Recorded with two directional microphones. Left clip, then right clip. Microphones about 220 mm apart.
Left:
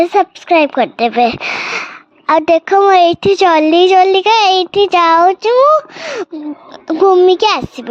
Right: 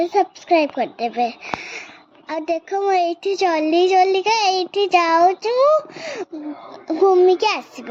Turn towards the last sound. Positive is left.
turn(degrees=45)  # may be behind; listen again after turning